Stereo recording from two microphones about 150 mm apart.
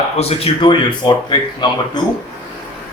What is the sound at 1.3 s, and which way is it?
Speech, 30° left (ahead or behind).